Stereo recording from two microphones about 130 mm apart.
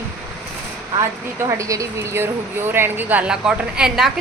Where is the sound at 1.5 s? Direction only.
25° right (ahead or behind).